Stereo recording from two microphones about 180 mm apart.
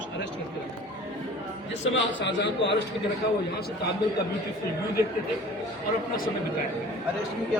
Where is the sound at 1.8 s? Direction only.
75° left (ahead or behind).